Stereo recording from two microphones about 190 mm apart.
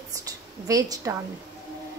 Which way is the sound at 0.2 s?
20° right (ahead or behind).